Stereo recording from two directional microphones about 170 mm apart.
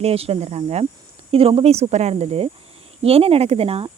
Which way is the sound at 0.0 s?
35° right (ahead or behind).